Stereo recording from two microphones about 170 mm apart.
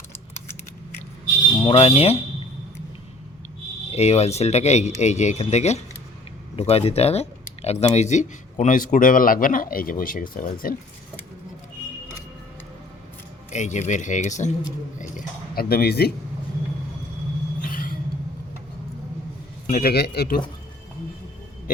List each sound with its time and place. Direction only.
1.6 s speech: 35° left (ahead or behind)
3.9 s speech: 40° left (ahead or behind); by 10.8 s 55° left (ahead or behind)
13.5 s speech: 45° left (ahead or behind); by 16.1 s 65° left (ahead or behind)
17.6 s vehicle: 55° left (ahead or behind)
19.6 s speech: 60° left (ahead or behind)